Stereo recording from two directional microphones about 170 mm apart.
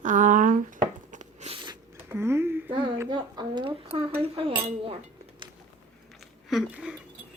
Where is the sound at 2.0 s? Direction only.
15° right (ahead or behind).